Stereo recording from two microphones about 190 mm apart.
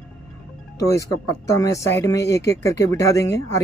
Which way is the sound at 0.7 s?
15° left (ahead or behind).